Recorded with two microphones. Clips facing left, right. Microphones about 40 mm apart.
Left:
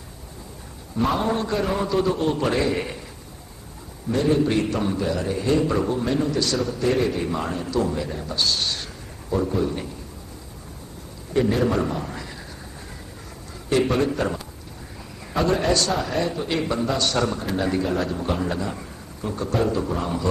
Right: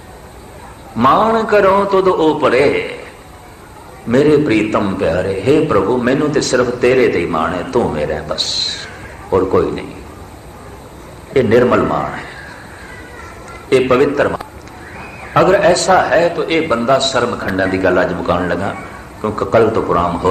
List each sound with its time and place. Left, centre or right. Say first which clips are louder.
0.9 s a man's voice: right 12 dB; right
2.1 s a man's voice: right 11 dB; right
4.1 s a man's voice: right 10 dB; right
9.3 s a man's voice: right 11 dB; right
11.3 s a man's voice: right 11 dB; right
13.7 s a man's voice: right 10 dB; right